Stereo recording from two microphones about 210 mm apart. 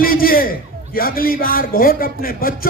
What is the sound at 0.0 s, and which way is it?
Speech, 45° left (ahead or behind).